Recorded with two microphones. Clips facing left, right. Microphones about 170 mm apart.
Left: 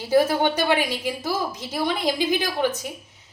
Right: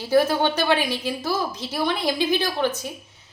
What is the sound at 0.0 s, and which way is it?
A woman's voice, 15° left (ahead or behind).